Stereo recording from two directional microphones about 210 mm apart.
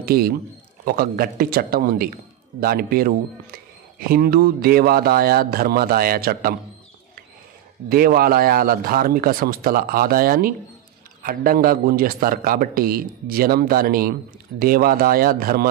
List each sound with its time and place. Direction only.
0.0 s a man's voice: 45° right (ahead or behind)
7.9 s a man's voice: 45° right (ahead or behind)